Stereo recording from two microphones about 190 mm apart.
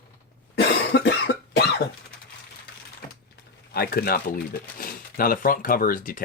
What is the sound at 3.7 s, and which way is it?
Speech, 55° left (ahead or behind).